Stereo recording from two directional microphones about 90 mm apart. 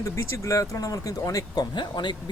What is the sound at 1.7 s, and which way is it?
Speech, 60° left (ahead or behind).